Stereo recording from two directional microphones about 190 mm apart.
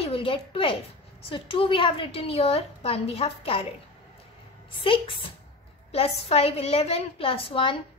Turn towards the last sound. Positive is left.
turn(degrees=30)  # may be behind; listen again after turning